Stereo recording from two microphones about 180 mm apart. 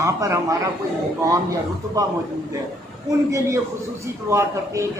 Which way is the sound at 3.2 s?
15° right (ahead or behind).